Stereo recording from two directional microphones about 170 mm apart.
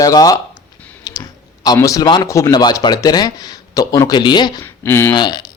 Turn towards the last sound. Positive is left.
turn(degrees=25)  # may be behind; listen again after turning